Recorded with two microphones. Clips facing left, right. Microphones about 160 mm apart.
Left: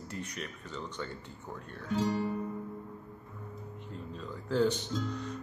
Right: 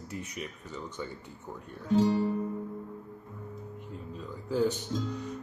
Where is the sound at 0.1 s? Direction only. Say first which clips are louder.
Right 2 dB; 5° right (ahead or behind).